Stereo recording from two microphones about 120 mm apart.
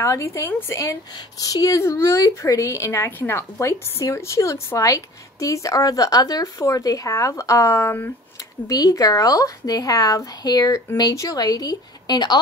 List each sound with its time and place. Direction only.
0.0 s a woman's voice: 25° left (ahead or behind)